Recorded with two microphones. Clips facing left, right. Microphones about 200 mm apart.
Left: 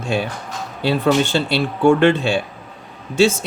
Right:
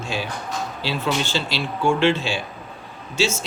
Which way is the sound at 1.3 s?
60° left (ahead or behind).